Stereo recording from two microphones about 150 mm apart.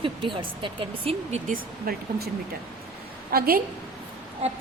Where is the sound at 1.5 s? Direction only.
80° right.